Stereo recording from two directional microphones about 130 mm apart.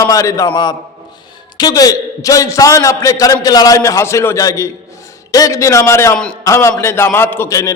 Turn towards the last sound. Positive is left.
turn(degrees=25)  # may be behind; listen again after turning